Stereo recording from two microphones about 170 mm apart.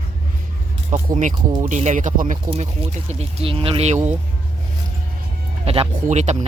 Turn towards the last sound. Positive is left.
turn(degrees=-40)  # may be behind; listen again after turning